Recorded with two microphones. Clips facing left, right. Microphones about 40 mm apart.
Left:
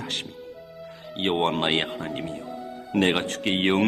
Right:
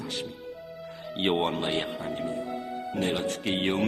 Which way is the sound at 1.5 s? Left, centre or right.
Left.